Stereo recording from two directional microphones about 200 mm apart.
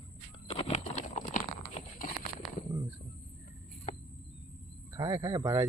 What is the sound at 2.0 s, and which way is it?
Horse, 45° left (ahead or behind).